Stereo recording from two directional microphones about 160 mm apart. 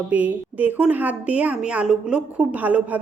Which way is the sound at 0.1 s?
10° right (ahead or behind).